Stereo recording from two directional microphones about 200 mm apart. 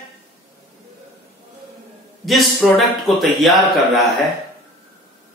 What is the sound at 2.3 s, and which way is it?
A man's voice, centre (ahead or behind).